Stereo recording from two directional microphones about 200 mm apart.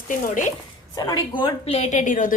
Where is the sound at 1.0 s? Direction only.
20° left (ahead or behind); by 2.3 s 40° left (ahead or behind).